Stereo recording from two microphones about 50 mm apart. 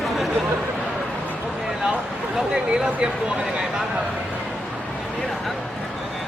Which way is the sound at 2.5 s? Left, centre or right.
Centre.